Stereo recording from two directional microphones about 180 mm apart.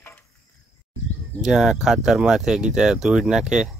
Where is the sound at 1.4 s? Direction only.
Centre (ahead or behind).